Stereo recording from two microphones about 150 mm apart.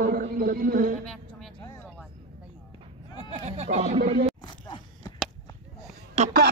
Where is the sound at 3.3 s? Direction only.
45° right (ahead or behind).